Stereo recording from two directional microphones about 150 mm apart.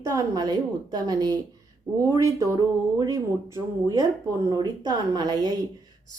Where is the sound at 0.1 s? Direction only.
25° right (ahead or behind).